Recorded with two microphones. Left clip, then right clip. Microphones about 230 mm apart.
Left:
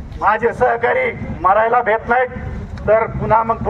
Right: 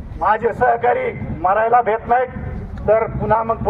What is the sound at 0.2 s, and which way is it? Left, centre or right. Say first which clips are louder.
A man's voice: left 1 dB; left.